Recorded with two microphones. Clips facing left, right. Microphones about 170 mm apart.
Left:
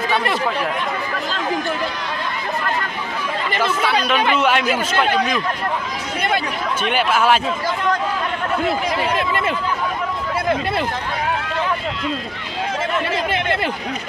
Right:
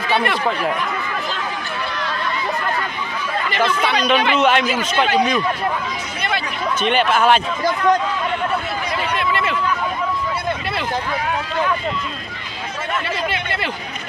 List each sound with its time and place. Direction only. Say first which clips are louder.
3.6 s speech: right 1 dB; 5° left (ahead or behind)
6.8 s speech: right 2 dB; 5° left (ahead or behind)